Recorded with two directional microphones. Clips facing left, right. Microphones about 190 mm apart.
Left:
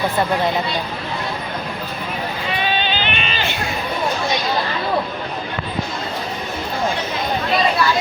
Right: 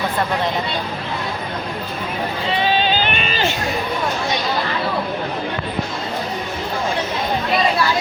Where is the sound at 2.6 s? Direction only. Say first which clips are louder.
Right 4 dB; 35° right (ahead or behind).